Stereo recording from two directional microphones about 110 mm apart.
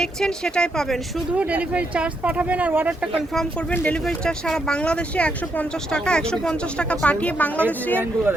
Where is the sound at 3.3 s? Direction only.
10° left (ahead or behind).